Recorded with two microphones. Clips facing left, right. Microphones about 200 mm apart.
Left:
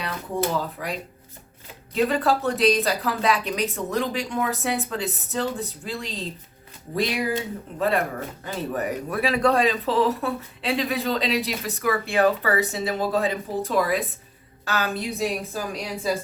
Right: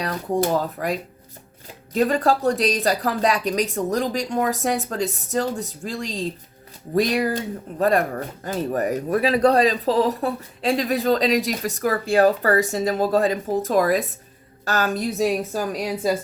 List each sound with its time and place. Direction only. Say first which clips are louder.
0.0 s speech: right 4 dB; 45° right (ahead or behind)